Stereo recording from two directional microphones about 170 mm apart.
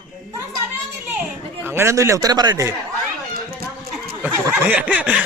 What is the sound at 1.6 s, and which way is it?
Speech, 15° right (ahead or behind).